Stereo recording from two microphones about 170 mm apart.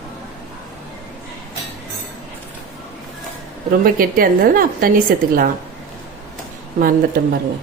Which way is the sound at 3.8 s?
60° right (ahead or behind).